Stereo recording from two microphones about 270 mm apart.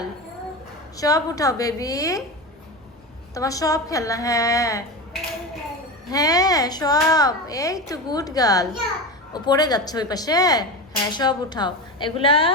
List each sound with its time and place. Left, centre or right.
0.9 s a child's voice: centre
3.3 s a child's voice: centre
6.1 s a child's voice: centre